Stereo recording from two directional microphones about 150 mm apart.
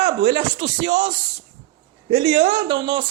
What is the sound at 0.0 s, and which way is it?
Speech, 30° right (ahead or behind).